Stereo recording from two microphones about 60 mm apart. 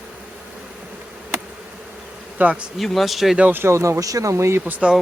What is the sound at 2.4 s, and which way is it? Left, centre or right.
Speech, right.